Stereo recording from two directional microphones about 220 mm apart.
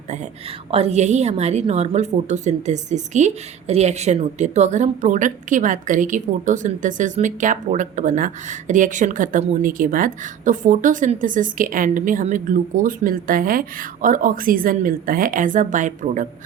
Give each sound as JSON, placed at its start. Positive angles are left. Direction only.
{"t": 0.7, "sound": "a woman's voice", "side_deg": -30}